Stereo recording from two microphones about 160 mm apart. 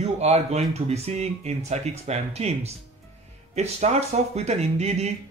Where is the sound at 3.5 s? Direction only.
45° right (ahead or behind).